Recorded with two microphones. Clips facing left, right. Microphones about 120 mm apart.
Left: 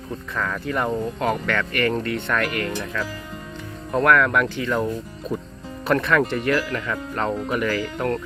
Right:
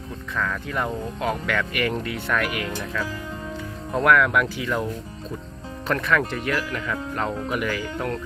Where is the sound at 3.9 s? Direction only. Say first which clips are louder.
Left 1 dB; 5° right (ahead or behind).